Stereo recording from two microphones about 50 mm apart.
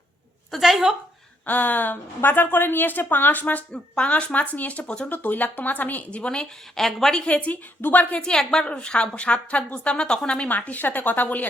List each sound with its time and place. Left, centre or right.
0.5 s a sound: centre
1.5 s a woman's voice: left
3.7 s a woman's voice: left
5.1 s a woman's voice: left
6.1 s a woman's voice: left
6.7 s a woman's voice: centre; by 8.2 s left
8.4 s a woman's voice: centre
10.5 s a woman's voice: left